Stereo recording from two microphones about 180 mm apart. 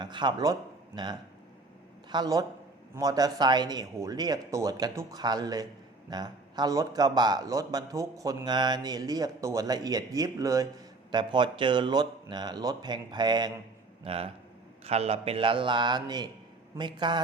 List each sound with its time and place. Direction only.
0.0 s a man's voice: 25° right (ahead or behind)